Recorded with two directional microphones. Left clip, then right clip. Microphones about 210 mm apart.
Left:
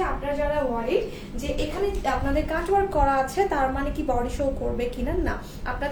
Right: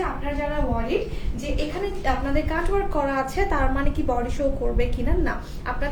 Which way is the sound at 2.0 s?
20° right (ahead or behind).